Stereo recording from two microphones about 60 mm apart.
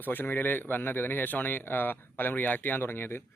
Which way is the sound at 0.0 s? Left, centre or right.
Left.